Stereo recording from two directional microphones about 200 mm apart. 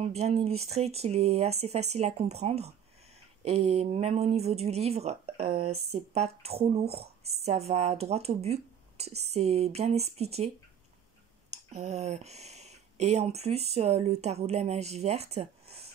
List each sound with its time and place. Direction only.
0.0 s speech: 30° right (ahead or behind)
11.7 s speech: 35° right (ahead or behind)